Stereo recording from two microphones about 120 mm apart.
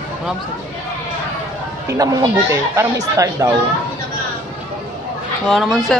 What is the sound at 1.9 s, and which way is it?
Speech, 30° right (ahead or behind).